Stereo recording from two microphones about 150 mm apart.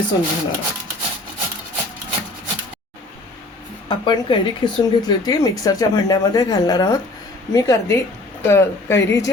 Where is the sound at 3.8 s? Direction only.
30° left (ahead or behind).